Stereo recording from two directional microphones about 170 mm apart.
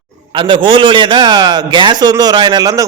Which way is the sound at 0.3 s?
30° right (ahead or behind).